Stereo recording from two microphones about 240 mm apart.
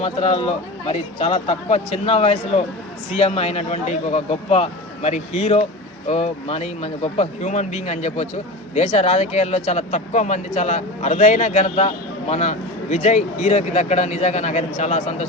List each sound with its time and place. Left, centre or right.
0.0 s speech: left